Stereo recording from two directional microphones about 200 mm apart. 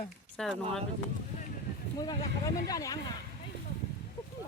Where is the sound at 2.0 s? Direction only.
20° left (ahead or behind).